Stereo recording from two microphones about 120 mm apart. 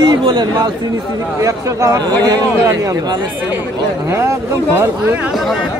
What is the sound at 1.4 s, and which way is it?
Speech, 30° right (ahead or behind).